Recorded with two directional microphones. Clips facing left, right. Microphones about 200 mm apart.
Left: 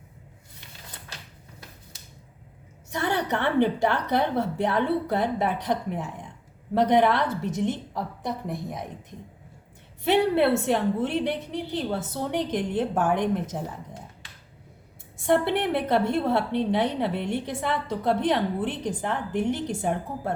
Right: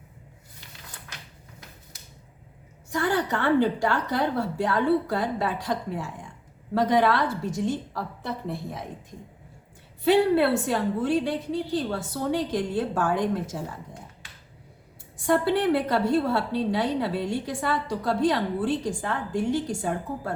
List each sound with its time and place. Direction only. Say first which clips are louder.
2.9 s a woman's voice: right 1 dB; 20° left (ahead or behind)
10.0 s a woman's voice: right 1 dB; 20° left (ahead or behind)
15.4 s a woman's voice: right 2 dB; 20° left (ahead or behind)